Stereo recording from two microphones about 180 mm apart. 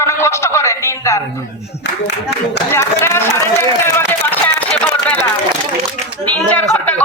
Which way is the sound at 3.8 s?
10° left (ahead or behind).